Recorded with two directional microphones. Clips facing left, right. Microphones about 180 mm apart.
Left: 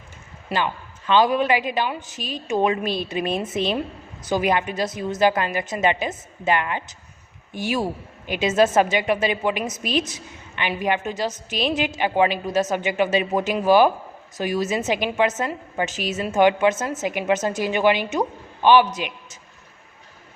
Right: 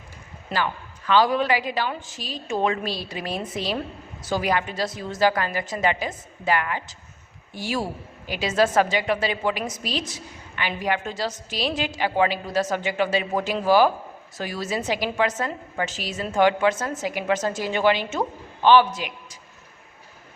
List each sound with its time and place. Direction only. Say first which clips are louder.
0.5 s a woman's voice: left 2 dB; 20° left (ahead or behind)